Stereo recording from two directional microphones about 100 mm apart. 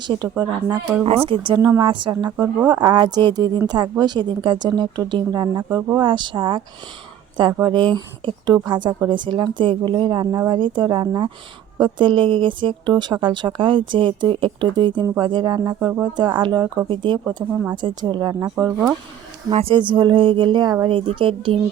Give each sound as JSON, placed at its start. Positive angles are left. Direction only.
{"t": 0.0, "sound": "a woman's voice", "side_deg": -45}
{"t": 1.0, "sound": "speech", "side_deg": -70}
{"t": 1.8, "sound": "a woman's voice", "side_deg": -55}
{"t": 15.5, "sound": "speech", "side_deg": -35}
{"t": 16.1, "sound": "a woman's voice", "side_deg": -50}
{"t": 17.5, "sound": "speech", "side_deg": -20}
{"t": 17.7, "sound": "a woman's voice", "side_deg": -50}
{"t": 18.6, "sound": "speech", "side_deg": -25}
{"t": 19.5, "sound": "speech", "side_deg": -70}
{"t": 19.7, "sound": "a woman's voice", "side_deg": -50}